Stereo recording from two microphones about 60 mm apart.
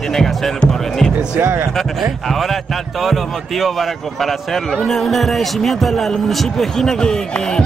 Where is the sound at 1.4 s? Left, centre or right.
Right.